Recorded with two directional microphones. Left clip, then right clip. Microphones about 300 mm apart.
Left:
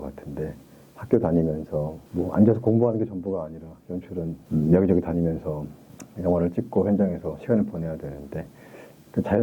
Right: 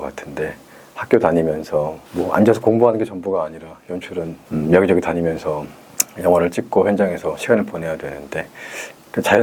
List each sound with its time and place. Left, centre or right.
0.0 s speech: centre